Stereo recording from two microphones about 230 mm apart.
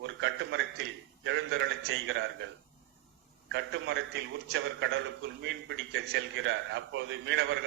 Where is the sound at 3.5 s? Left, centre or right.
Right.